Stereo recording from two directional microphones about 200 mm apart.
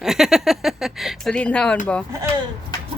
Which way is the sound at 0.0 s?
Centre (ahead or behind).